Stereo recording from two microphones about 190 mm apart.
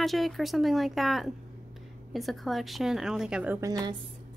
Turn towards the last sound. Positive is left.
turn(degrees=-20)  # may be behind; listen again after turning